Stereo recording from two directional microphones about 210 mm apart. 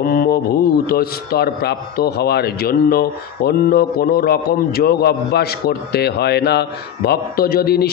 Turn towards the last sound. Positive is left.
turn(degrees=45)  # may be behind; listen again after turning